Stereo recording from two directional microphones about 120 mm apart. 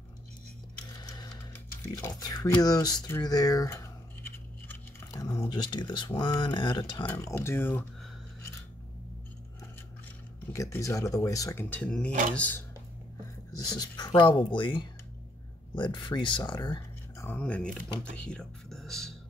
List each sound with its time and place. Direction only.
1.0 s sewing machine: 35° left (ahead or behind)
2.0 s speech: 35° left (ahead or behind)
3.2 s a sound: 30° left (ahead or behind)
5.0 s speech: 30° left (ahead or behind)
7.1 s speech: 25° left (ahead or behind)
10.5 s speech: 25° left (ahead or behind)
11.7 s speech: 10° left (ahead or behind)
13.6 s speech: 35° left (ahead or behind)
17.3 s speech: 10° left (ahead or behind)